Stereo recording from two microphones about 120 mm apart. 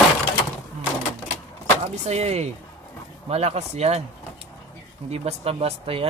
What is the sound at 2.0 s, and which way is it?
Speech, 65° right (ahead or behind).